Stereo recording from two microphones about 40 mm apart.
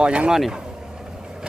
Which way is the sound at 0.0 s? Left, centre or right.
Right.